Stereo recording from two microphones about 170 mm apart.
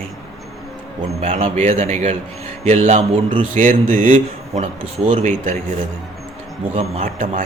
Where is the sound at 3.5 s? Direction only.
50° right (ahead or behind).